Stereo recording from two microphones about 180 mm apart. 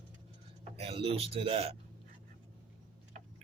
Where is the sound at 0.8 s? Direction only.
30° right (ahead or behind).